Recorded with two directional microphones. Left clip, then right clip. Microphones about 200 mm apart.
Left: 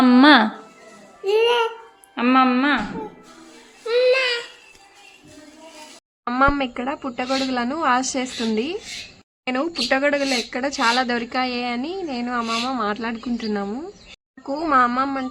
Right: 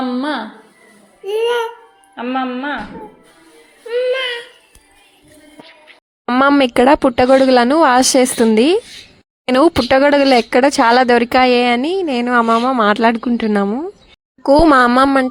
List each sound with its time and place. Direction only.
0.0 s a sound: 35° left (ahead or behind)
1.2 s music: 5° left (ahead or behind)
2.1 s speech: 30° left (ahead or behind)
3.8 s a sound: 15° left (ahead or behind)
6.6 s speech: 50° right (ahead or behind); by 13.9 s 30° right (ahead or behind)
14.4 s speech: 45° right (ahead or behind)